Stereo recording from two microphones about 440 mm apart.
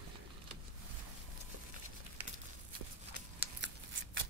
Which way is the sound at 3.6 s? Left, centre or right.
Right.